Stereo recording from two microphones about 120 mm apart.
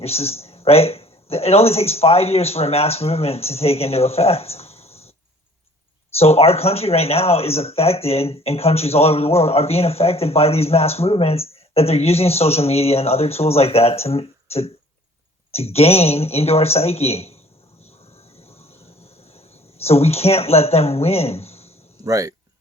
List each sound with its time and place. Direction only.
0.0 s speech: 55° left (ahead or behind)
6.1 s speech: 55° left (ahead or behind)
18.3 s a sound: 60° left (ahead or behind)
19.8 s speech: 60° left (ahead or behind)
22.0 s speech: 25° right (ahead or behind)